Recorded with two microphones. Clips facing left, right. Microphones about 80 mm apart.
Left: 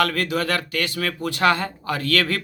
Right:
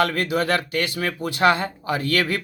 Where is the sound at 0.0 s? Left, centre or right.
Right.